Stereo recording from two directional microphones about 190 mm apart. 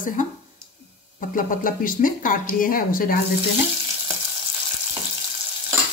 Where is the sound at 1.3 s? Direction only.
45° left (ahead or behind).